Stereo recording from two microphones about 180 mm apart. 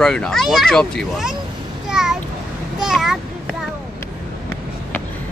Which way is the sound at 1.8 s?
5° right (ahead or behind).